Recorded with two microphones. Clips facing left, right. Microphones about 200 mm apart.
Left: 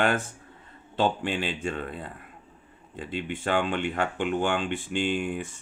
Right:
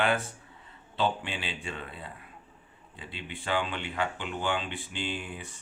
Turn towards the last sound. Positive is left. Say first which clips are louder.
# left 8 dB
turn(degrees=50)  # may be behind; listen again after turning